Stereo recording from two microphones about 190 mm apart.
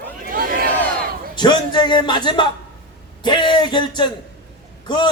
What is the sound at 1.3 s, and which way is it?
A man's voice, 25° left (ahead or behind).